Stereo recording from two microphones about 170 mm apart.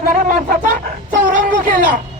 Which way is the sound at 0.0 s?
55° right (ahead or behind).